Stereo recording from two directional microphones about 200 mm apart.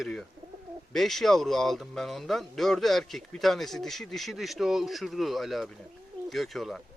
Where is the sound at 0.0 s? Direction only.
Centre (ahead or behind).